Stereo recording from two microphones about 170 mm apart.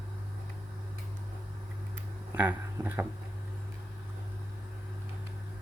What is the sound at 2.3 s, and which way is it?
Speech, 10° right (ahead or behind).